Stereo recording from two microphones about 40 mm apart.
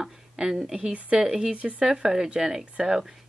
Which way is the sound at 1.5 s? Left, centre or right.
Right.